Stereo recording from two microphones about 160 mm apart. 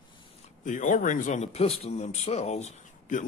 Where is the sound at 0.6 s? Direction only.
50° left (ahead or behind).